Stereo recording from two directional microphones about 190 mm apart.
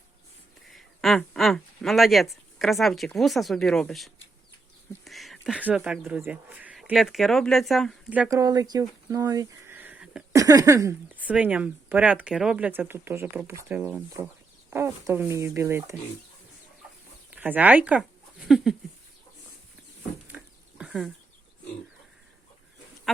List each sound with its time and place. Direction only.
0.7 s speech: centre (ahead or behind)
8.3 s speech: 15° right (ahead or behind)
10.3 s speech: 20° right (ahead or behind)
17.3 s speech: 10° right (ahead or behind)
20.2 s a sound: 5° right (ahead or behind)